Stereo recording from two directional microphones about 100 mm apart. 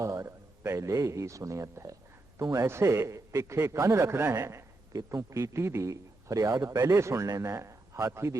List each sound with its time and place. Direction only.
0.0 s a man's voice: 30° right (ahead or behind)